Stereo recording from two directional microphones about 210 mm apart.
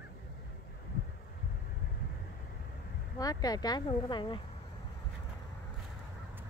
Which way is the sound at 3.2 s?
20° left (ahead or behind).